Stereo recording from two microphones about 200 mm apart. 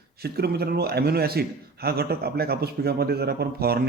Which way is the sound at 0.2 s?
50° right (ahead or behind).